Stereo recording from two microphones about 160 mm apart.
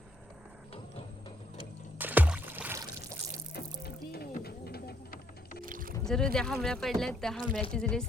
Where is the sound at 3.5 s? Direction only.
75° left (ahead or behind).